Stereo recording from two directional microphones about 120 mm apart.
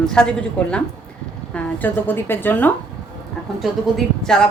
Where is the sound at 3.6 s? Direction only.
5° left (ahead or behind).